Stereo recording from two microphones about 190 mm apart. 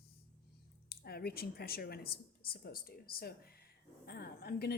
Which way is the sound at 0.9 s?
55° left (ahead or behind).